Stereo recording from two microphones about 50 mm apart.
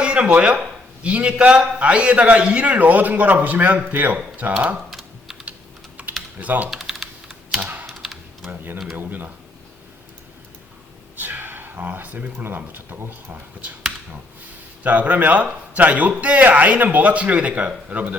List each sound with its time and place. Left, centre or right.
0.0 s a man's voice: right
4.9 s typing: centre
6.0 s typing: right
6.4 s speech: right
6.7 s typing: centre
8.4 s speech: right
11.2 s a sound: right
11.9 s speech: right
14.8 s a man's voice: right